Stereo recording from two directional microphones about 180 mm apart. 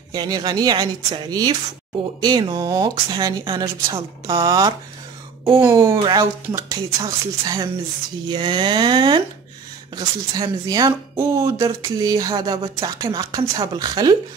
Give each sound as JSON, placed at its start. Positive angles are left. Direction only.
{"t": 0.1, "sound": "speech", "side_deg": -25}